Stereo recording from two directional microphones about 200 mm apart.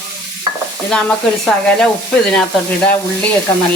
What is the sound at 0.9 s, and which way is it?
Speech, 5° left (ahead or behind).